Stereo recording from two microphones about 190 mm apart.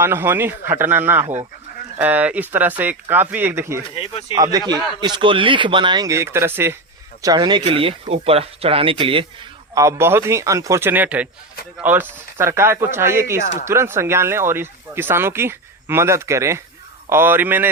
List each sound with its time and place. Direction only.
0.0 s speech: 10° right (ahead or behind)
3.8 s speech: 30° left (ahead or behind)
4.4 s speech: 20° right (ahead or behind)
9.7 s speech: 15° right (ahead or behind)